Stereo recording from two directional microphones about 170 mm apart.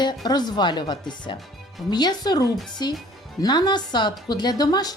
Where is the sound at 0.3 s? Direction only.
25° left (ahead or behind).